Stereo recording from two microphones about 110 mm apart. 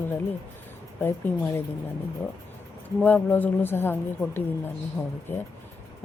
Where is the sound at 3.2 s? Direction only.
15° left (ahead or behind).